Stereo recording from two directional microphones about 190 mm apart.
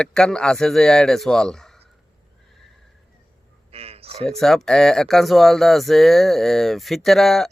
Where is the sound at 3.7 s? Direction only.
30° right (ahead or behind).